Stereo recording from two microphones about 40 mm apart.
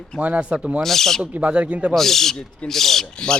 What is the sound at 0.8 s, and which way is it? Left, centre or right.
Speech, centre.